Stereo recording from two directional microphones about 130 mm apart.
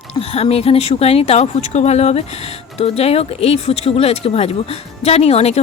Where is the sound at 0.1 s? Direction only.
50° left (ahead or behind).